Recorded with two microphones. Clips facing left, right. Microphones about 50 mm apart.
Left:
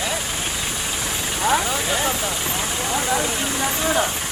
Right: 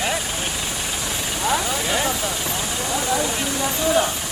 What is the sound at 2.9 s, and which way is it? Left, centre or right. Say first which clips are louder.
Vehicle: even; left.